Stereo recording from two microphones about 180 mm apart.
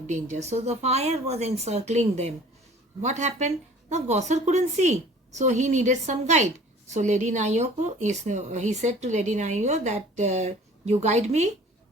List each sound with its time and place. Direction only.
0.1 s speech: 40° right (ahead or behind)